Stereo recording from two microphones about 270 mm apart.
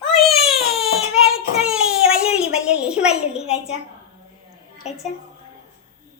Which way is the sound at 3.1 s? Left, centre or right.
Left.